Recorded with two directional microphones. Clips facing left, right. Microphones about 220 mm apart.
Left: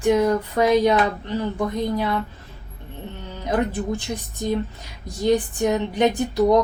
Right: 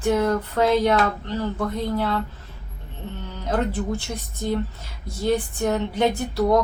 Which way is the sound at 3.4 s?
15° left (ahead or behind).